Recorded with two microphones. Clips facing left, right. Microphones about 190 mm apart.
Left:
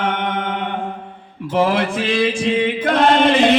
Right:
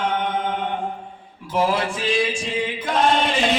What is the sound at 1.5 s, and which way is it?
Chant, 60° left (ahead or behind).